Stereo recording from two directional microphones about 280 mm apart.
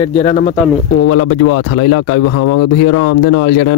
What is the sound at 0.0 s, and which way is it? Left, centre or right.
Speech, left.